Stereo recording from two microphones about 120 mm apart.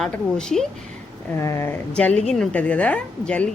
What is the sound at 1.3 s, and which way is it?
Speech, 25° left (ahead or behind).